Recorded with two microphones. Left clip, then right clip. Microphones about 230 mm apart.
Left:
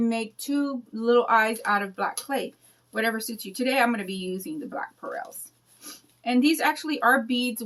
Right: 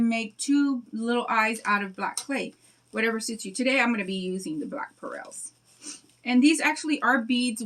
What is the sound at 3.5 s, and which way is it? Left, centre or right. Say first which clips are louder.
Speech: left 1 dB; centre.